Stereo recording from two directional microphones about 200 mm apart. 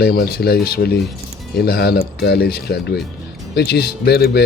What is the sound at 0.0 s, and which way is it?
Speech, 50° left (ahead or behind).